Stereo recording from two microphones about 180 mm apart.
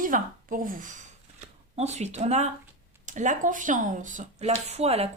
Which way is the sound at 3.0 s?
45° right (ahead or behind).